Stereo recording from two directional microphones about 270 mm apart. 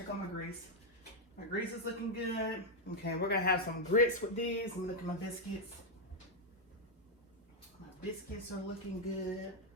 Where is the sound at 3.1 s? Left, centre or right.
Left.